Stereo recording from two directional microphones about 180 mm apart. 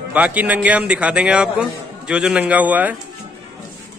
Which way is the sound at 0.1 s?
10° right (ahead or behind).